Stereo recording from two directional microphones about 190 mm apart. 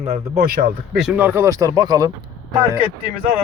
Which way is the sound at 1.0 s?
5° right (ahead or behind).